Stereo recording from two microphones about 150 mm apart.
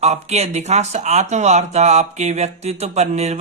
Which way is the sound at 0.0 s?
45° right (ahead or behind).